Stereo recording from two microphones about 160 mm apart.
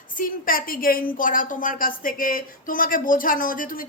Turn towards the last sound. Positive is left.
turn(degrees=60)  # may be behind; listen again after turning